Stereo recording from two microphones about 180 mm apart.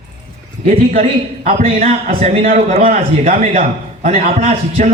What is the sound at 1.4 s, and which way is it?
A man's voice, 40° right (ahead or behind).